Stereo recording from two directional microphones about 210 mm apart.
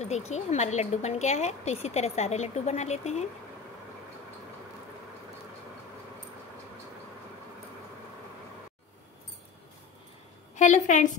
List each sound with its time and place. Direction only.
0.3 s a woman's voice: 30° left (ahead or behind)
10.5 s a woman's voice: 35° left (ahead or behind)